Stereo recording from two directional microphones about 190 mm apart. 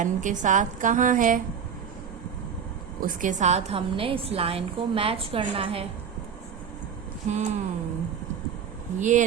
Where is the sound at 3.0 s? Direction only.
40° right (ahead or behind).